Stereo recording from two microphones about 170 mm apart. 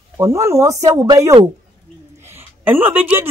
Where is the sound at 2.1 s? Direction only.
15° right (ahead or behind).